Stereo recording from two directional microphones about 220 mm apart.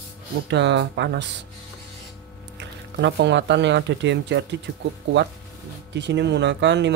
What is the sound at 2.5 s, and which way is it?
Speech, 55° right (ahead or behind).